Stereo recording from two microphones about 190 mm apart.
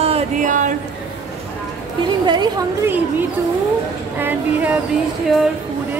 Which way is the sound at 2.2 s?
20° right (ahead or behind).